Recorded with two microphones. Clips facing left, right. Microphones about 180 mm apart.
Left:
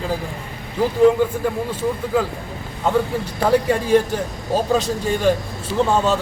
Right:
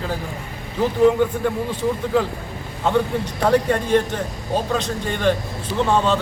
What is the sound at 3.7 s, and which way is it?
Speech, 5° left (ahead or behind).